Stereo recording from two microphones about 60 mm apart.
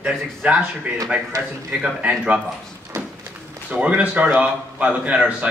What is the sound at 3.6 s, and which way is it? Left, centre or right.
A man's voice, right.